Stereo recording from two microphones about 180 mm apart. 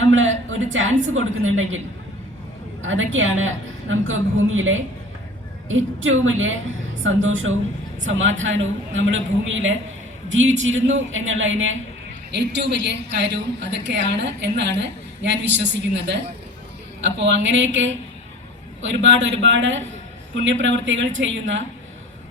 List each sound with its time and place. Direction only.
0.0 s a woman's voice: 90° right
2.8 s a woman's voice: 90° right
12.3 s a woman's voice: 75° right (ahead or behind)
17.0 s a woman's voice: 90° right